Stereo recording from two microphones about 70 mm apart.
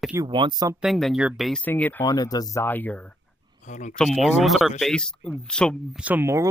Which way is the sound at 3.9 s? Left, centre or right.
Centre.